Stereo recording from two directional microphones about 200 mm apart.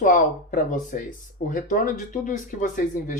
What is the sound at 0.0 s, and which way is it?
Speech, 40° left (ahead or behind).